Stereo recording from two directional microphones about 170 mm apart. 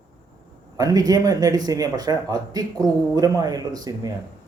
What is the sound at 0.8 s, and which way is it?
A man's voice, 20° right (ahead or behind).